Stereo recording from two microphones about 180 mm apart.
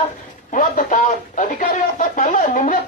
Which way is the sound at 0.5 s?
45° left (ahead or behind).